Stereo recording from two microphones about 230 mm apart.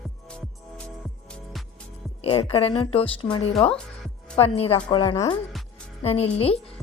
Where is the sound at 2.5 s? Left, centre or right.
Left.